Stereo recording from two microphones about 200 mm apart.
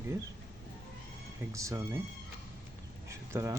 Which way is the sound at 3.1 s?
15° right (ahead or behind).